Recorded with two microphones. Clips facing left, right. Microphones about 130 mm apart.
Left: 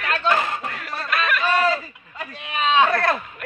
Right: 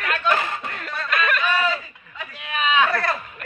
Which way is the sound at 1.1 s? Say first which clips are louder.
Even; 5° left (ahead or behind).